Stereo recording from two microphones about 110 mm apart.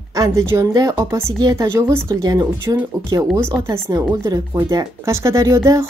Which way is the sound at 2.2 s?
35° right (ahead or behind).